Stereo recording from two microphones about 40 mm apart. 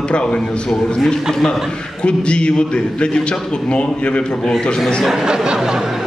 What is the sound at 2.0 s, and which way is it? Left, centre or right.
A man's voice, left.